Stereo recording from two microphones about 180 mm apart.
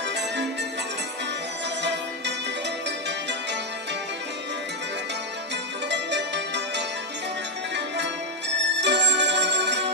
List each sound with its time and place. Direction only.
5.9 s music: 75° right (ahead or behind)
8.8 s music: 75° right (ahead or behind)